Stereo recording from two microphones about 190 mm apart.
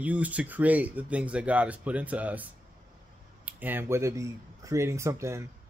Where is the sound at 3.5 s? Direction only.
10° right (ahead or behind).